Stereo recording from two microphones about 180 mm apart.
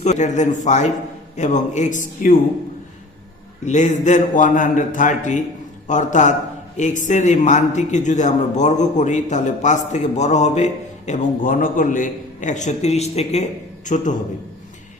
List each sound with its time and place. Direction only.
0.0 s a man's voice: 40° left (ahead or behind)
3.7 s a man's voice: 40° left (ahead or behind)